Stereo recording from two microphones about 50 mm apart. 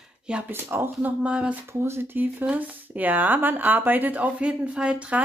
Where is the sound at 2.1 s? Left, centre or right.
Right.